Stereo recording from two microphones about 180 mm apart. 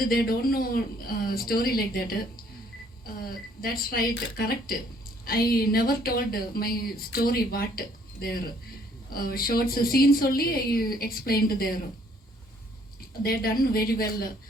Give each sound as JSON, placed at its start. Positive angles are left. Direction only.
{"t": 0.0, "sound": "speech", "side_deg": 55}
{"t": 13.2, "sound": "speech", "side_deg": 55}